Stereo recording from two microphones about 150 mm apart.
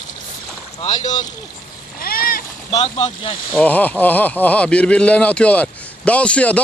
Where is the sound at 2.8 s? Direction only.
40° left (ahead or behind).